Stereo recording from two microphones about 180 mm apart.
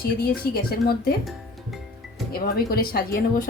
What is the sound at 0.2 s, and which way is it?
Speech, 60° left (ahead or behind).